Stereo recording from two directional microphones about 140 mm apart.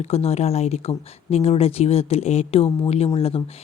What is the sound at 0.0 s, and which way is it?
Speech, 45° left (ahead or behind).